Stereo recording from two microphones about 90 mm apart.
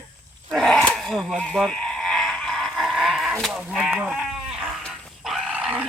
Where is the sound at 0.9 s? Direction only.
Centre (ahead or behind).